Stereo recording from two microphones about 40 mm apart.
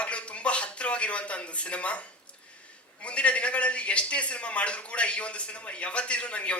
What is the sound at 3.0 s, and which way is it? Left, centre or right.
A man's voice, left.